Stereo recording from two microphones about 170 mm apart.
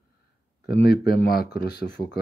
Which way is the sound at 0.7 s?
70° left (ahead or behind).